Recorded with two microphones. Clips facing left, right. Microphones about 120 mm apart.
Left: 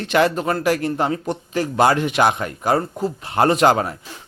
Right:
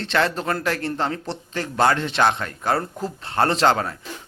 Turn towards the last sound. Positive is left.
turn(degrees=15)  # may be behind; listen again after turning